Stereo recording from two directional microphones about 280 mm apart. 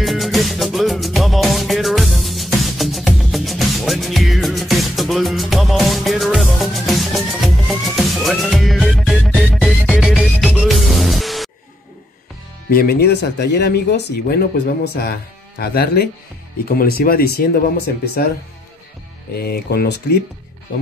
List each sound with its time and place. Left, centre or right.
0.0 s music: centre
12.6 s speech: left
19.3 s speech: left